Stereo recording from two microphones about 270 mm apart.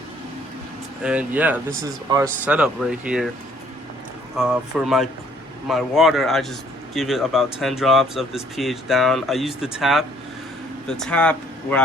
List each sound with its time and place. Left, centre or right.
1.0 s a man's voice: centre
4.4 s a man's voice: centre